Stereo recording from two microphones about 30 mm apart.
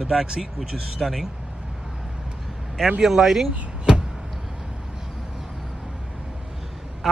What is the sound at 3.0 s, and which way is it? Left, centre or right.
Speech, centre.